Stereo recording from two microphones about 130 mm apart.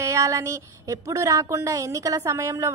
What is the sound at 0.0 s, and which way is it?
A woman's voice, 25° right (ahead or behind).